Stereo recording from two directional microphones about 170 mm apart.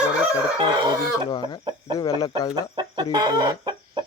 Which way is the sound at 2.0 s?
25° left (ahead or behind).